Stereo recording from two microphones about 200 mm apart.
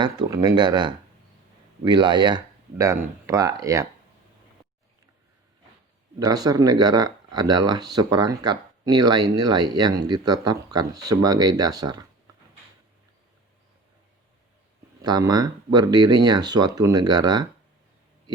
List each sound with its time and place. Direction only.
0.0 s speech: 20° right (ahead or behind)
6.1 s speech: 20° right (ahead or behind)
15.0 s speech: 20° right (ahead or behind)